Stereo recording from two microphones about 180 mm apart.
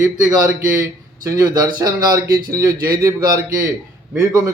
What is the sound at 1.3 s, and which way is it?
A man's voice, 20° right (ahead or behind).